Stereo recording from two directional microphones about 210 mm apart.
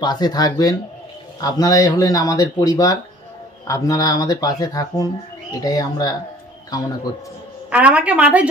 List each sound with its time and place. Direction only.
0.0 s speech: 20° left (ahead or behind)
7.7 s a woman's voice: 5° right (ahead or behind)